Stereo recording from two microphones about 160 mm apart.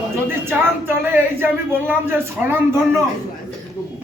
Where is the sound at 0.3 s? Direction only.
15° right (ahead or behind).